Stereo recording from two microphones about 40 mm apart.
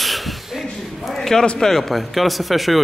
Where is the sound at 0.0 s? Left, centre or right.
Centre.